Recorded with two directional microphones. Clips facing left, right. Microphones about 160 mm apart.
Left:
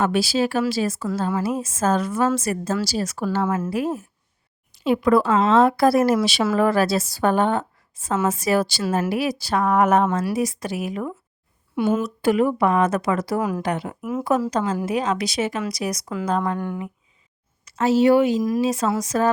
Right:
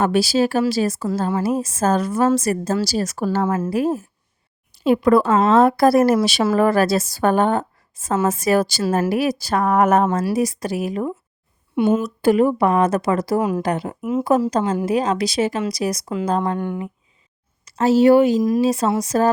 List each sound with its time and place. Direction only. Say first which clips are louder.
0.0 s a woman's voice: right 3 dB; 40° right (ahead or behind)
11.8 s a woman's voice: right 3 dB; 20° right (ahead or behind)
12.2 s a woman's voice: right 3 dB; 35° right (ahead or behind)
14.0 s a woman's voice: right 5 dB; 20° right (ahead or behind)
14.5 s a woman's voice: right 3 dB; 35° right (ahead or behind)
17.7 s a woman's voice: right 3 dB; 35° right (ahead or behind)